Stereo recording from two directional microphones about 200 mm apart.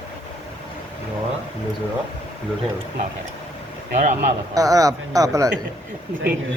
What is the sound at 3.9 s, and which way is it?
Speech, 40° right (ahead or behind).